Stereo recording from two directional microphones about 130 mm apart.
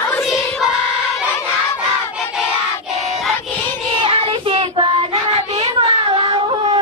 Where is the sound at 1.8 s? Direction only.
5° right (ahead or behind).